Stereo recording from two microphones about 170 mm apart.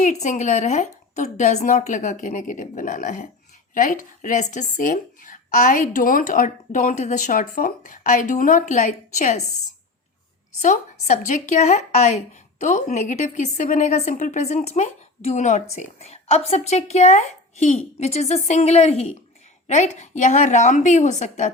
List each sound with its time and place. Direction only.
0.0 s a woman's voice: 45° left (ahead or behind)
10.6 s a woman's voice: 45° left (ahead or behind)